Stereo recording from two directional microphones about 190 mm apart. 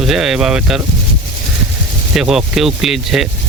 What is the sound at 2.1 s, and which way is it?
Speech, centre (ahead or behind).